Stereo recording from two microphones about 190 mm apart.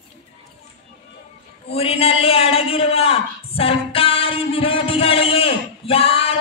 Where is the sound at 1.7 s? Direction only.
30° left (ahead or behind).